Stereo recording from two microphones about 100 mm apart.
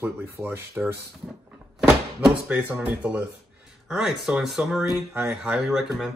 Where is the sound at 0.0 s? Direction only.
20° right (ahead or behind).